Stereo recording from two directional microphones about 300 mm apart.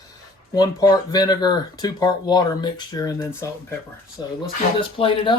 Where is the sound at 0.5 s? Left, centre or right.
Centre.